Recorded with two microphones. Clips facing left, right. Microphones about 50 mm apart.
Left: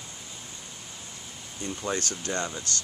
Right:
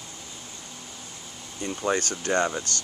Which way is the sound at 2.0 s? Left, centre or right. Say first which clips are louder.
Right 6 dB; right.